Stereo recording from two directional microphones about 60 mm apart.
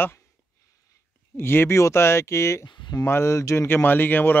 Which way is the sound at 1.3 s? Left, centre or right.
Left.